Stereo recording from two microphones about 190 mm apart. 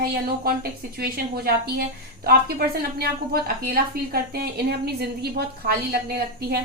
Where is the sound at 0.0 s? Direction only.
50° right (ahead or behind).